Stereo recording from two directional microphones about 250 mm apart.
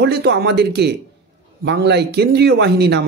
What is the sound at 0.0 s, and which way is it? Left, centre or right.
Speech, right.